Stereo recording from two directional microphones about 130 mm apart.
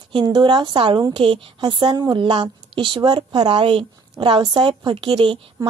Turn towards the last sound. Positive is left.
turn(degrees=-35)  # may be behind; listen again after turning